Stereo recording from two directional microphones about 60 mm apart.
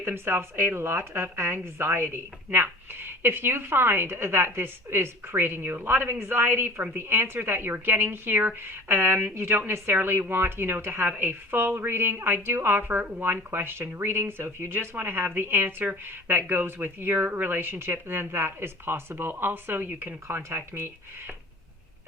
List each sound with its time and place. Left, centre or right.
0.0 s speech: right